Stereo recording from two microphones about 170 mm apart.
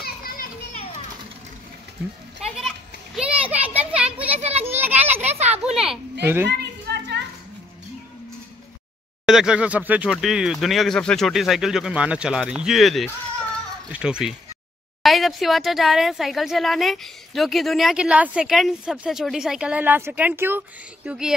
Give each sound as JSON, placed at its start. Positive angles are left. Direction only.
{"t": 0.0, "sound": "children playing", "side_deg": 60}
{"t": 3.2, "sound": "children playing", "side_deg": -10}
{"t": 4.4, "sound": "children playing", "side_deg": -40}
{"t": 4.6, "sound": "children playing", "side_deg": -10}
{"t": 5.6, "sound": "speech", "side_deg": -5}
{"t": 6.6, "sound": "a sound", "side_deg": -80}
{"t": 9.2, "sound": "speech", "side_deg": -5}